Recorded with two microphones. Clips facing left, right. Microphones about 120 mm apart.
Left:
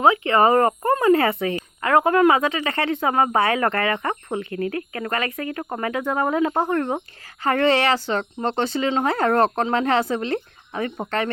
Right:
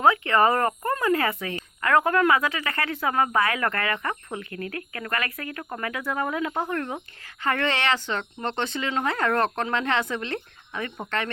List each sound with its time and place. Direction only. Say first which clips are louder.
0.0 s speech: left 3 dB; 20° left (ahead or behind); by 11.3 s 35° left (ahead or behind)